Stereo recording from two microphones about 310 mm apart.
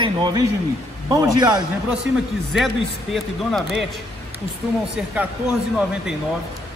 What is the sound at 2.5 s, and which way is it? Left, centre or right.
A man's voice, centre.